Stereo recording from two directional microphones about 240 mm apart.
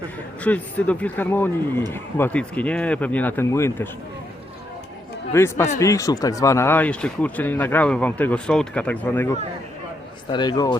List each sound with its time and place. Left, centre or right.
0.4 s speech: centre
5.3 s speech: centre
10.3 s speech: centre